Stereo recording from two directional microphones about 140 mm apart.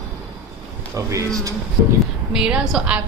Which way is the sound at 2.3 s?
5° right (ahead or behind).